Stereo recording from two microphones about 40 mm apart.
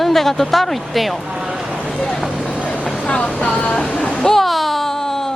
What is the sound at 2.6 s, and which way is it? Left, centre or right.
Vehicle, left.